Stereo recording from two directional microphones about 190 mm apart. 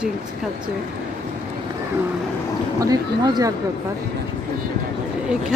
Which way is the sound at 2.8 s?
20° right (ahead or behind).